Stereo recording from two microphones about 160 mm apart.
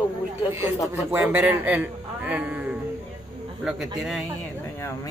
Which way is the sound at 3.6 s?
Centre (ahead or behind).